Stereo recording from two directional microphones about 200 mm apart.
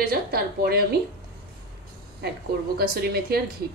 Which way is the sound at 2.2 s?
55° right (ahead or behind).